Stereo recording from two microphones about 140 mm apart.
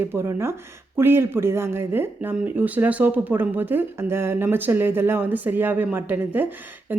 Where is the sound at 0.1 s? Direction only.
15° right (ahead or behind).